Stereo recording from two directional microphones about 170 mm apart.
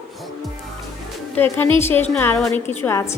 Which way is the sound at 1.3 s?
10° left (ahead or behind).